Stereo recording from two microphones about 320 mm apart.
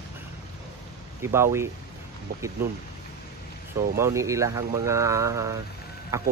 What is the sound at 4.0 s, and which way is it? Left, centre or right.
Speech, centre.